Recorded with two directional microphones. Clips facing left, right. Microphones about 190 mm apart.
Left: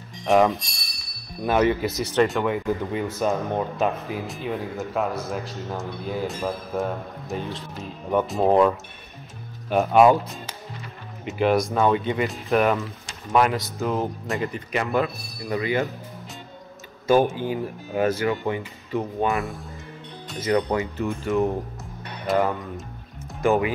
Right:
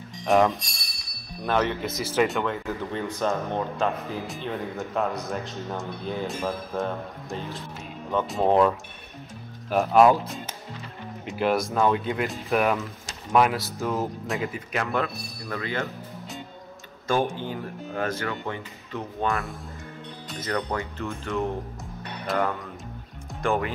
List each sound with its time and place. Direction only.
0.2 s a sound: centre (ahead or behind)
1.4 s speech: 10° left (ahead or behind)
2.4 s speech: 10° left (ahead or behind)
15.4 s speech: 15° left (ahead or behind)
17.1 s speech: 10° left (ahead or behind)
22.2 s speech: centre (ahead or behind)